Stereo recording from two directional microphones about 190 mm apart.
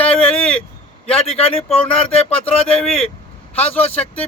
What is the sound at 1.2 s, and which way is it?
Speech, 30° left (ahead or behind).